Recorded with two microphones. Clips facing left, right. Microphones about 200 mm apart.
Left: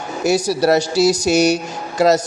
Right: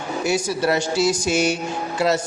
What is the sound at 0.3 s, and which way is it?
Speech, 40° left (ahead or behind).